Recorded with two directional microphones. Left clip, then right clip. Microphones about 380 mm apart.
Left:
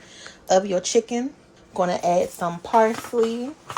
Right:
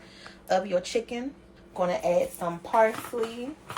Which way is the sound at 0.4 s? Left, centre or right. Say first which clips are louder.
Left 6 dB; centre.